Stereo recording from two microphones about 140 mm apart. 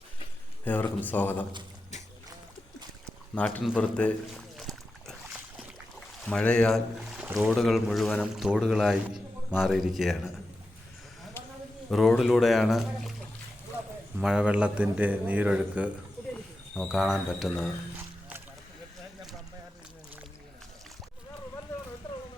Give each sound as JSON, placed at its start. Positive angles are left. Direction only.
{"t": 0.6, "sound": "speech", "side_deg": 15}
{"t": 3.3, "sound": "speech", "side_deg": 10}
{"t": 3.8, "sound": "a sound", "side_deg": 10}
{"t": 6.2, "sound": "speech", "side_deg": 5}
{"t": 11.4, "sound": "a sound", "side_deg": 15}
{"t": 11.9, "sound": "speech", "side_deg": 0}
{"t": 14.2, "sound": "a man's voice", "side_deg": -5}
{"t": 16.7, "sound": "speech", "side_deg": 0}